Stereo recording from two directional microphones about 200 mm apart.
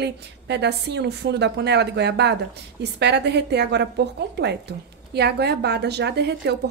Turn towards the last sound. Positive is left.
turn(degrees=-60)  # may be behind; listen again after turning